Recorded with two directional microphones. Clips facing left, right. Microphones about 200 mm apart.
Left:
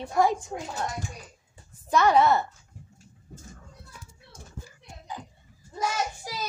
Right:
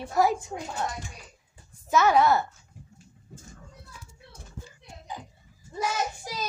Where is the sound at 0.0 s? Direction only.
5° right (ahead or behind).